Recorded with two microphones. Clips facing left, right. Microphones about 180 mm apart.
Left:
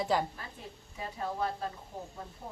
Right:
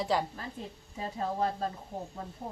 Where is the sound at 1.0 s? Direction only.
35° right (ahead or behind).